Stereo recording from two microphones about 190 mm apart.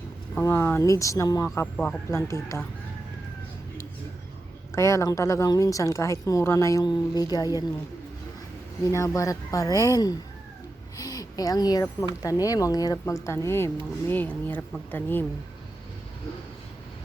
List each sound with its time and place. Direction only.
0.3 s a woman's voice: 10° left (ahead or behind)
4.7 s a woman's voice: 15° left (ahead or behind)
8.9 s a woman's voice: 15° left (ahead or behind)